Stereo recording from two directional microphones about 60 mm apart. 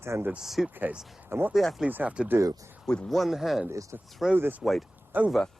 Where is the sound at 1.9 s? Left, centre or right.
Right.